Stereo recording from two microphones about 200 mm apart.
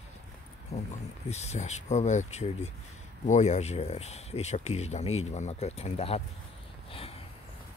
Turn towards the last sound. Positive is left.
turn(degrees=30)  # may be behind; listen again after turning